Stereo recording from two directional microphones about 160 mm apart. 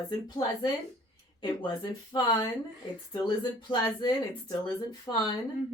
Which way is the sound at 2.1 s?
30° left (ahead or behind).